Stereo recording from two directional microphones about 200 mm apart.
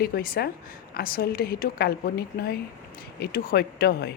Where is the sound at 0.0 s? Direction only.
50° left (ahead or behind).